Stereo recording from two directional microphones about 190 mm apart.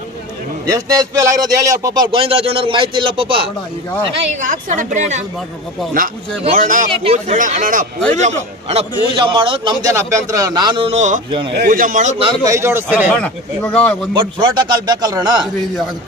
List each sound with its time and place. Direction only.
0.7 s a man's voice: 20° right (ahead or behind)
4.4 s a woman's voice: 45° right (ahead or behind)
6.5 s a man's voice: 45° right (ahead or behind)
7.0 s a woman's voice: 30° right (ahead or behind)
7.3 s a man's voice: 45° right (ahead or behind)
11.5 s a man's voice: 50° right (ahead or behind)
12.3 s speech: 15° right (ahead or behind)
13.1 s speech: 10° left (ahead or behind)
14.1 s a man's voice: 25° right (ahead or behind)